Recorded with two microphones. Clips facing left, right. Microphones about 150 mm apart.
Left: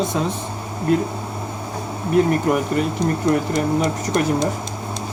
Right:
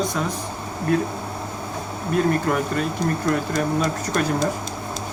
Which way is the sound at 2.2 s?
20° left (ahead or behind).